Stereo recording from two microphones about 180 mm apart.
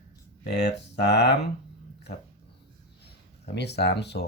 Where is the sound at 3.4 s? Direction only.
65° left (ahead or behind).